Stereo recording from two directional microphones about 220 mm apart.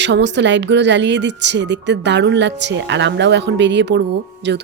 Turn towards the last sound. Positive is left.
turn(degrees=-50)  # may be behind; listen again after turning